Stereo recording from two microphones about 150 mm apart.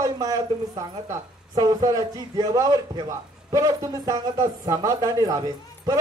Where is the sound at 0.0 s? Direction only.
25° right (ahead or behind).